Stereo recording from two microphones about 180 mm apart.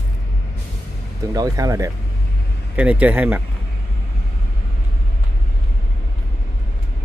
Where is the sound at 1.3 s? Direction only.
20° right (ahead or behind).